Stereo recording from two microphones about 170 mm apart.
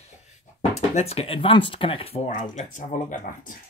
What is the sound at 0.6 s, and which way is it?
Speech, 40° left (ahead or behind).